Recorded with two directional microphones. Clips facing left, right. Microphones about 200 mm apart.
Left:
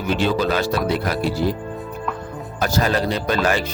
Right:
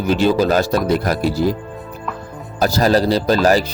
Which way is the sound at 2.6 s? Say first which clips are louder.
Right 5 dB; 35° right (ahead or behind).